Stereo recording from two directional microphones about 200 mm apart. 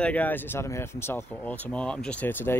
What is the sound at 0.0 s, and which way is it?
Speech, 5° left (ahead or behind).